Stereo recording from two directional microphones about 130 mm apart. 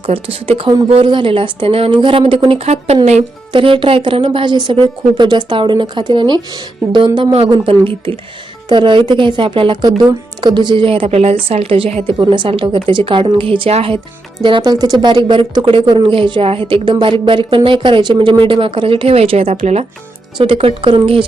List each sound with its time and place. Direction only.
0.0 s speech: 45° right (ahead or behind)
3.5 s speech: 40° right (ahead or behind)
12.1 s speech: 35° right (ahead or behind)
14.4 s speech: 35° right (ahead or behind)